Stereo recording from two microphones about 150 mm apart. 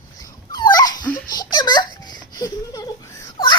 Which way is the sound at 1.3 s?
25° left (ahead or behind).